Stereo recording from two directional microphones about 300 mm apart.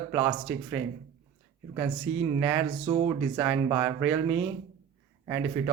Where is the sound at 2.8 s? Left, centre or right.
Centre.